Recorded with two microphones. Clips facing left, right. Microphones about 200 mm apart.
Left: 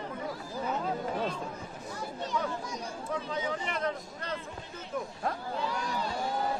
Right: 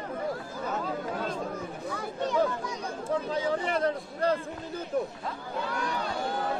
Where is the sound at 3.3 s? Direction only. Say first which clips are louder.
Right 6 dB; 35° right (ahead or behind).